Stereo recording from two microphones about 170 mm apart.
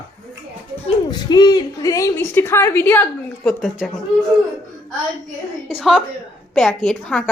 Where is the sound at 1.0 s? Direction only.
25° left (ahead or behind); by 3.8 s centre (ahead or behind).